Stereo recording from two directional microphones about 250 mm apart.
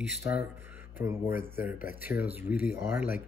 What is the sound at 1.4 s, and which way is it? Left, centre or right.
Speech, centre.